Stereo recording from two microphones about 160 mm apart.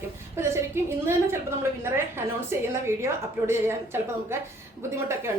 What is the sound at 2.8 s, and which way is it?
A woman's voice, 15° right (ahead or behind).